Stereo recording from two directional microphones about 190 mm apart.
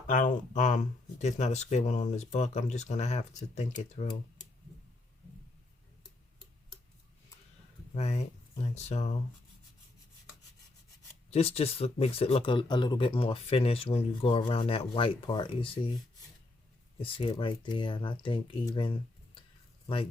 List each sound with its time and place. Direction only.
0.1 s speech: 45° left (ahead or behind)
7.9 s speech: 35° left (ahead or behind)
11.3 s speech: 30° left (ahead or behind)
17.0 s speech: 30° left (ahead or behind)